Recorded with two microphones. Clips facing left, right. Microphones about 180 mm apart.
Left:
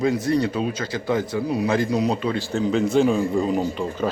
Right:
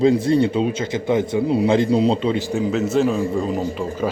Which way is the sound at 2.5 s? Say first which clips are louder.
Right 1 dB; 10° right (ahead or behind).